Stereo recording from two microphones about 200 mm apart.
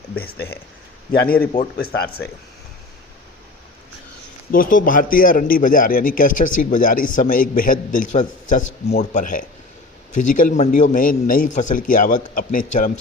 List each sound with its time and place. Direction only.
1.1 s a man's voice: 50° left (ahead or behind)
4.5 s a man's voice: 45° left (ahead or behind)